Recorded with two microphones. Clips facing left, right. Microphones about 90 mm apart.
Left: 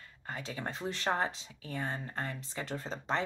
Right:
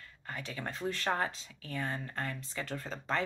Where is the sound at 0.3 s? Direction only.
30° left (ahead or behind).